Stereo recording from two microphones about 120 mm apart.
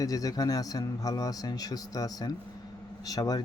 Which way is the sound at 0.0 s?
30° left (ahead or behind).